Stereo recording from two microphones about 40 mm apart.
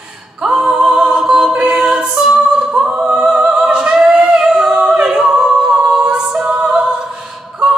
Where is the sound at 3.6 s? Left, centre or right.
Right.